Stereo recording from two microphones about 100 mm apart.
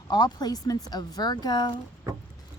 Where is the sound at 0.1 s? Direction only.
45° left (ahead or behind).